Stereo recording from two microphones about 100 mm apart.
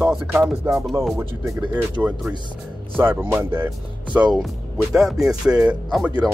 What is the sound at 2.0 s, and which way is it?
Speech, 15° right (ahead or behind).